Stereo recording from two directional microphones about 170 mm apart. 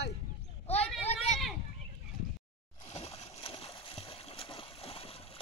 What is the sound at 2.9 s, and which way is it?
Splash, 40° left (ahead or behind).